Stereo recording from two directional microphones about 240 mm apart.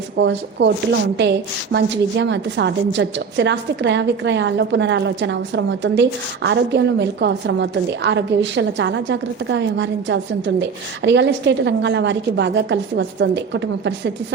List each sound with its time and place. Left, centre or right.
0.2 s a woman's voice: right